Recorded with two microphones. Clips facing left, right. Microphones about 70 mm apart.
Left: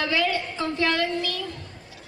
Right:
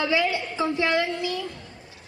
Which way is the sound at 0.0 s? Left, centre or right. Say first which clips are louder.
Right 1 dB; centre.